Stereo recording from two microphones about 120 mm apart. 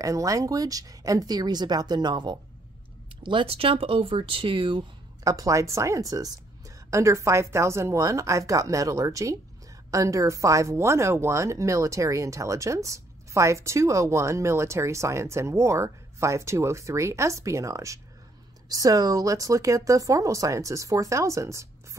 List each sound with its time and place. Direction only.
0.0 s speech: 30° right (ahead or behind)
3.3 s speech: 50° right (ahead or behind)
5.2 s speech: 30° right (ahead or behind)